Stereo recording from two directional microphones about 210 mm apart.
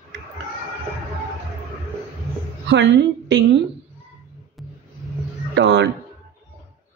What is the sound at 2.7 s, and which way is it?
Speech, 55° right (ahead or behind).